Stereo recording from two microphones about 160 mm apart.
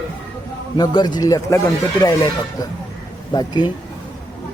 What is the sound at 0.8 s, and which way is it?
Speech, 25° left (ahead or behind).